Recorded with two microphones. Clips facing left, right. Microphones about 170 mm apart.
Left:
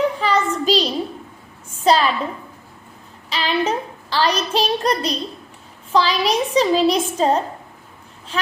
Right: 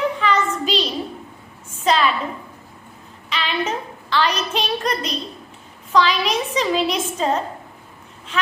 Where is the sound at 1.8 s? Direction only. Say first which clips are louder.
Left 2 dB; 35° left (ahead or behind).